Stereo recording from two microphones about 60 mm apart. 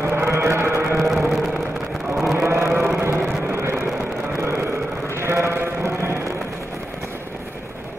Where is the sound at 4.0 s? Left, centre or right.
Right.